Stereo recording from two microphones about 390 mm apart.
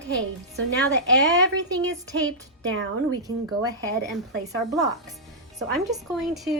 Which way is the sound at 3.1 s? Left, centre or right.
Centre.